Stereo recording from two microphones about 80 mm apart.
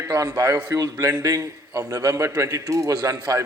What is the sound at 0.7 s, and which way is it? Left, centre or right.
A man's voice, right.